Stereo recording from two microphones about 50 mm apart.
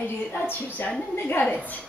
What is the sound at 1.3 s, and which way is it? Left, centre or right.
Speech, left.